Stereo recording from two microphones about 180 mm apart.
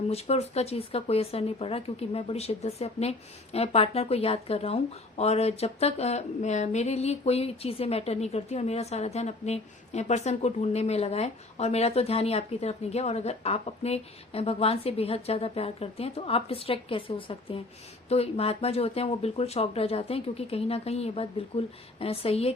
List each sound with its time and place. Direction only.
0.1 s speech: 35° left (ahead or behind)